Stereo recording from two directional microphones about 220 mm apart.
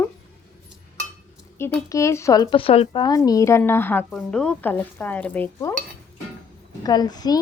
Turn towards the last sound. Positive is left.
turn(degrees=20)  # may be behind; listen again after turning